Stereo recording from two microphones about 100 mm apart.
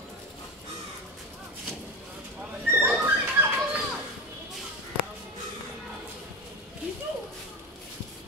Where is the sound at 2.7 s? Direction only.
20° right (ahead or behind).